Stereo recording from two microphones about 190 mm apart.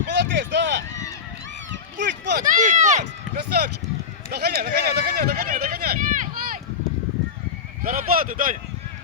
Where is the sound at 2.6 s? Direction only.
40° right (ahead or behind).